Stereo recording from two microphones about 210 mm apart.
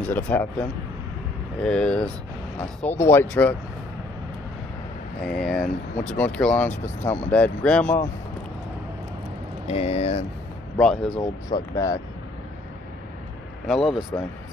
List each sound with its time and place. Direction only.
0.1 s speech: 10° left (ahead or behind)
5.2 s speech: centre (ahead or behind)
9.7 s speech: 30° left (ahead or behind)
10.8 s speech: centre (ahead or behind)
11.7 s speech: 15° left (ahead or behind)
13.7 s speech: centre (ahead or behind)